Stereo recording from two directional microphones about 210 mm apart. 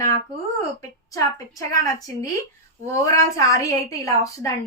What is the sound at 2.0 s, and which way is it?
Speech, 15° left (ahead or behind).